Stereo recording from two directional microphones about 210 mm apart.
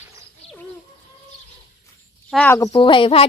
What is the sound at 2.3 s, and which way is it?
Speech, 5° left (ahead or behind).